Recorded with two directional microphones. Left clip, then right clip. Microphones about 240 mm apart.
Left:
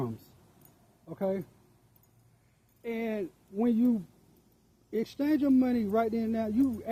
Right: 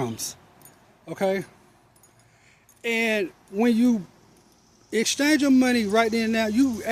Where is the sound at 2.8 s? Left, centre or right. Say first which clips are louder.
Right 11 dB; centre.